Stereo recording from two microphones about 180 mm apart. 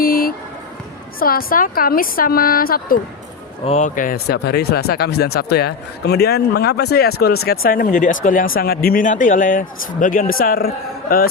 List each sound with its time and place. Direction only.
0.0 s music: 55° left (ahead or behind)
1.2 s speech: 55° left (ahead or behind)
3.7 s speech: 40° left (ahead or behind)